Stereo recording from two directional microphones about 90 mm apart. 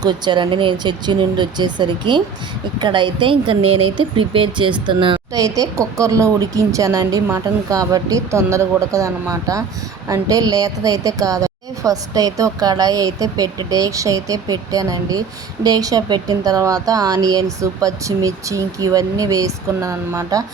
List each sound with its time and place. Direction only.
0.0 s speech: 55° right (ahead or behind)
5.3 s a woman's voice: 40° right (ahead or behind)